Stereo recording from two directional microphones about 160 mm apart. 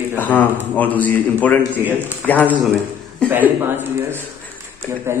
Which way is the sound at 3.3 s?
10° right (ahead or behind).